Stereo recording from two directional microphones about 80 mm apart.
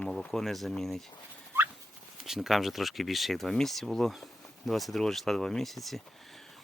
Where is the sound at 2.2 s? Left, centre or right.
Centre.